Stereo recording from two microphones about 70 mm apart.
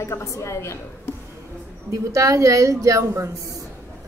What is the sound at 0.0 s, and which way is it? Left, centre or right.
A woman's voice, left.